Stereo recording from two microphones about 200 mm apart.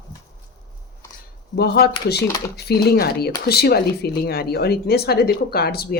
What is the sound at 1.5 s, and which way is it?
Speech, 50° left (ahead or behind).